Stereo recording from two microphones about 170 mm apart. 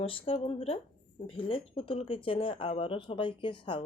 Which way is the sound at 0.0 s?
30° left (ahead or behind).